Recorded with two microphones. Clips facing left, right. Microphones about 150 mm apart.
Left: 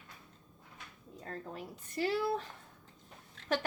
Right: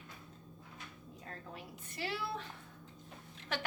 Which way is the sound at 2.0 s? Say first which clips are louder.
Left 8 dB; 45° left (ahead or behind).